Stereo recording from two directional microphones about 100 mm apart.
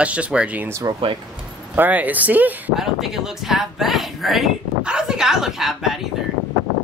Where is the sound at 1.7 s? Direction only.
15° right (ahead or behind).